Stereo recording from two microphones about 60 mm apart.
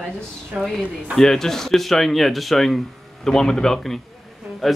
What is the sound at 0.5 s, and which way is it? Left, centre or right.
Speech, centre.